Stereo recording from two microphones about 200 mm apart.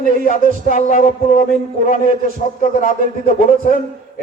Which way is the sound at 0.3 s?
40° left (ahead or behind).